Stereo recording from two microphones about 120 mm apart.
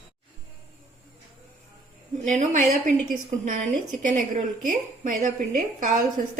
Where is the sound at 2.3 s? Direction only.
90° right.